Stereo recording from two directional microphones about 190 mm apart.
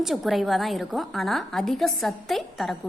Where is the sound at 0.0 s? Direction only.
Centre (ahead or behind).